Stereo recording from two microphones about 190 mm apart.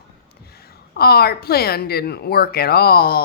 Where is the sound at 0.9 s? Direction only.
55° left (ahead or behind).